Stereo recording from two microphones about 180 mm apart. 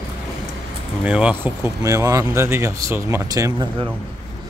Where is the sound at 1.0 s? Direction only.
5° right (ahead or behind).